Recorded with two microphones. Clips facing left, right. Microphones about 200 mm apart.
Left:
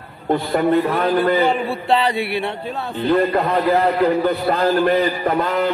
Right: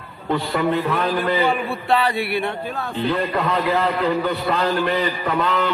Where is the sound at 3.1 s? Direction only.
40° left (ahead or behind).